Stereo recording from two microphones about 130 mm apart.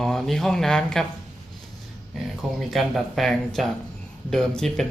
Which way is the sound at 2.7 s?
Centre (ahead or behind).